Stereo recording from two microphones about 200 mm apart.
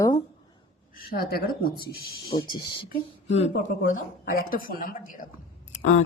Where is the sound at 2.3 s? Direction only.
20° left (ahead or behind).